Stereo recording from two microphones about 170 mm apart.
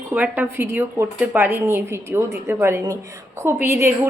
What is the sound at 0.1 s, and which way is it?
Speech, 10° right (ahead or behind).